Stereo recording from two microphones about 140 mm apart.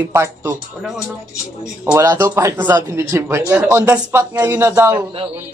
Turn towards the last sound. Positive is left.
turn(degrees=-20)  # may be behind; listen again after turning